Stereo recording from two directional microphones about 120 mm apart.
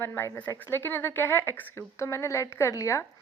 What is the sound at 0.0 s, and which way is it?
A woman's voice, 15° left (ahead or behind).